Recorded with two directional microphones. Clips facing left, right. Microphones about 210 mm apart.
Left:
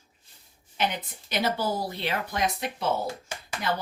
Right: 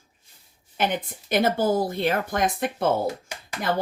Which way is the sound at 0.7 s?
50° right (ahead or behind).